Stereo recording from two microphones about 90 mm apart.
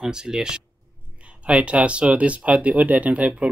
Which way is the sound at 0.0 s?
10° right (ahead or behind).